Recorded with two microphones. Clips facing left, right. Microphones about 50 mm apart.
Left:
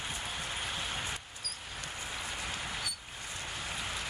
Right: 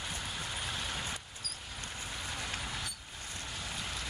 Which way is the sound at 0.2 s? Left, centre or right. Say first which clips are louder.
Left 1 dB; left.